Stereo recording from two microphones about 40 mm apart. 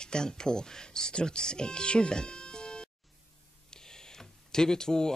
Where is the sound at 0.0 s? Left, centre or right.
Centre.